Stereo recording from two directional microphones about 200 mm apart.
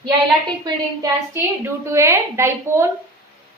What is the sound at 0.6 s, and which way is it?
A woman's voice, 15° right (ahead or behind).